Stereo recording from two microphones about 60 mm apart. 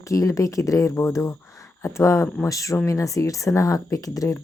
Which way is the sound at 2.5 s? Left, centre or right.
Left.